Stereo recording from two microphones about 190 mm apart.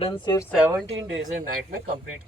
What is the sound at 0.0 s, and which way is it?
Speech, 20° left (ahead or behind).